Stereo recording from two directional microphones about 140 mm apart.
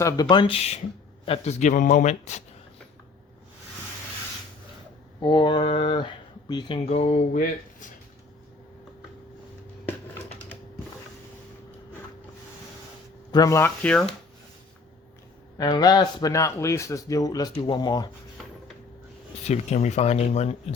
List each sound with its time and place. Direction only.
0.0 s a man's voice: 30° left (ahead or behind); by 2.4 s 55° left (ahead or behind)
5.2 s speech: 35° left (ahead or behind)
6.7 s speech: 50° left (ahead or behind)
7.3 s speech: 70° left (ahead or behind)
9.8 s computer keyboard: 15° left (ahead or behind)
13.3 s a man's voice: 25° left (ahead or behind)
13.8 s speech: 10° left (ahead or behind)
15.5 s a man's voice: 30° left (ahead or behind)
19.5 s speech: 50° left (ahead or behind)